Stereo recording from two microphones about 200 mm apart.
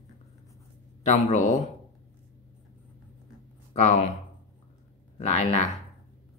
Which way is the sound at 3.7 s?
35° left (ahead or behind).